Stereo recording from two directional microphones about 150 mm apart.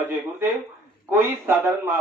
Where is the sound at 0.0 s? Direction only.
15° right (ahead or behind).